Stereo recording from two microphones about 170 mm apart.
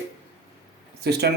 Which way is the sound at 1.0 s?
75° right (ahead or behind).